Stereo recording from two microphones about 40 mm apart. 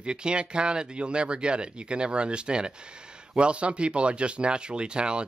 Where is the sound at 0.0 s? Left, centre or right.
Right.